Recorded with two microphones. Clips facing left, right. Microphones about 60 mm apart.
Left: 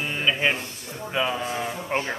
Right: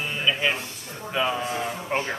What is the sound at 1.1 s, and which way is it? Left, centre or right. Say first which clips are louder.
Speech: even; centre.